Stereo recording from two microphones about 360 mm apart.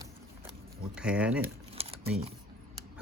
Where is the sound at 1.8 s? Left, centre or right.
Centre.